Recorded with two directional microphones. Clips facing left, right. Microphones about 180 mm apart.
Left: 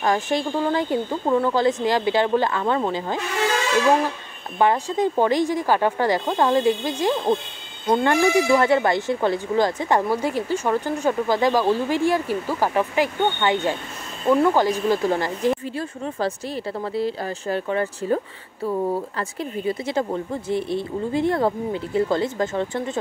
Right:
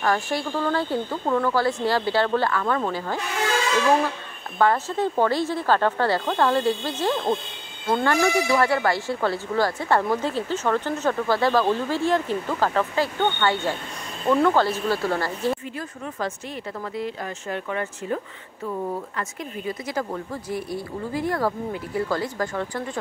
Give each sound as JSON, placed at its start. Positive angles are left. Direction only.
{"t": 0.0, "sound": "speech", "side_deg": 20}
{"t": 4.6, "sound": "speech", "side_deg": 15}
{"t": 15.7, "sound": "speech", "side_deg": 30}